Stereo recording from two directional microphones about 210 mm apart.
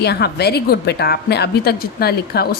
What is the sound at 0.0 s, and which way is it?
A woman's voice, 50° left (ahead or behind).